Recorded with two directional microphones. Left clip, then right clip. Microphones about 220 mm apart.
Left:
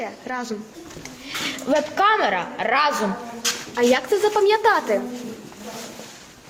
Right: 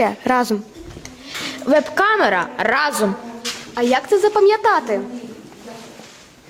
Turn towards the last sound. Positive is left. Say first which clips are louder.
# right 3 dB
turn(degrees=-25)  # may be behind; listen again after turning